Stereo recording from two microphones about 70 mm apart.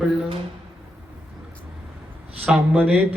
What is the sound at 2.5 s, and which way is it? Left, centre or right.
Speech, right.